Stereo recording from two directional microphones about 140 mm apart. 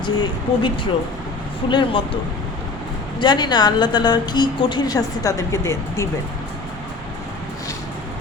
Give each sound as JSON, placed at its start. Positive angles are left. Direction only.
{"t": 0.0, "sound": "speech", "side_deg": 30}
{"t": 1.7, "sound": "speech", "side_deg": 35}
{"t": 3.2, "sound": "a woman's voice", "side_deg": 30}